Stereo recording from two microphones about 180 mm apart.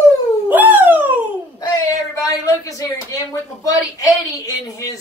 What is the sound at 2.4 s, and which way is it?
A woman's voice, 20° left (ahead or behind).